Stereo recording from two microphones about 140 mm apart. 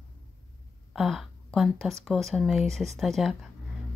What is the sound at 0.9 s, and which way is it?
A woman's voice, centre (ahead or behind).